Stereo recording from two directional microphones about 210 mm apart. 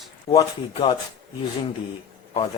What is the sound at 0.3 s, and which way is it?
Speech, 30° left (ahead or behind).